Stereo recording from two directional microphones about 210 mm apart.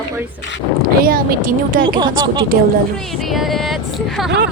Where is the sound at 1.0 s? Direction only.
45° right (ahead or behind).